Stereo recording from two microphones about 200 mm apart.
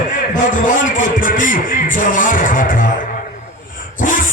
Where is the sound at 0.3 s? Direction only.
40° left (ahead or behind).